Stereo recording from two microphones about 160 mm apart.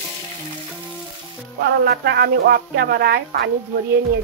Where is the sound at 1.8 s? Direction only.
80° right.